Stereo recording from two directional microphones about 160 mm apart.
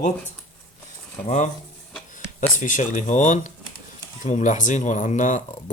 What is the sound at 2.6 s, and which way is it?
Speech, 55° left (ahead or behind).